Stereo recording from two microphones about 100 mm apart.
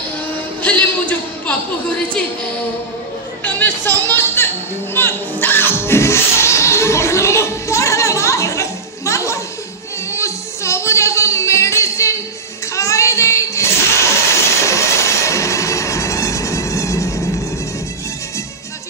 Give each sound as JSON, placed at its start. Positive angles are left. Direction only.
{"t": 0.6, "sound": "speech", "side_deg": 15}
{"t": 3.4, "sound": "a sound", "side_deg": 20}
{"t": 4.1, "sound": "children playing", "side_deg": 25}
{"t": 4.9, "sound": "music", "side_deg": 20}
{"t": 12.7, "sound": "child singing", "side_deg": 30}
{"t": 14.6, "sound": "music", "side_deg": 30}